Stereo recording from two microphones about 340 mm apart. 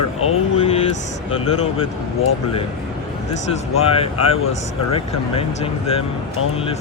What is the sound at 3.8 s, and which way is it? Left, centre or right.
Speech, centre.